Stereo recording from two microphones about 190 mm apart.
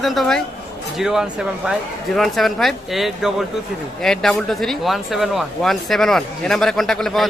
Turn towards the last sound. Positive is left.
turn(degrees=0)  # may be behind; listen again after turning